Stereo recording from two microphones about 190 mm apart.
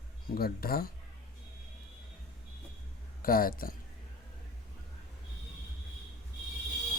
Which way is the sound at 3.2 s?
50° left (ahead or behind).